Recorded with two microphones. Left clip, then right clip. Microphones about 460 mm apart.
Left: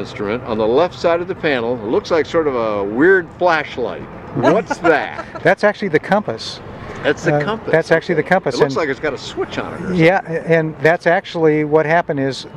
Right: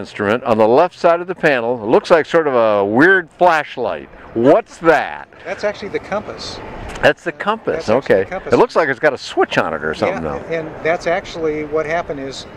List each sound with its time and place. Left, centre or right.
0.2 s speech: right
5.5 s speech: left
7.0 s speech: right
7.9 s speech: left
8.6 s speech: right
10.0 s speech: left